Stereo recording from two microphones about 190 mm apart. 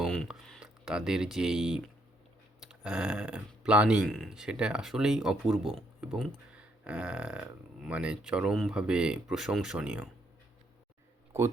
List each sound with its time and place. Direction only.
0.0 s speech: centre (ahead or behind)